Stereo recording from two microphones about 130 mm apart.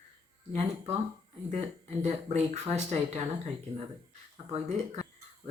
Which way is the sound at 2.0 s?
60° right (ahead or behind).